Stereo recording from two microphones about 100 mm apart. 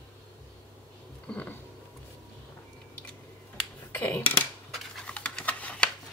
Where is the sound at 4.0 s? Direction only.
20° left (ahead or behind).